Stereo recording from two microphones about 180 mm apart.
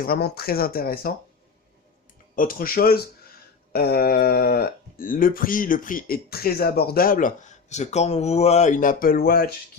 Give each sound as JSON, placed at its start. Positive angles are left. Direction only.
{"t": 0.0, "sound": "speech", "side_deg": 60}
{"t": 2.3, "sound": "speech", "side_deg": 50}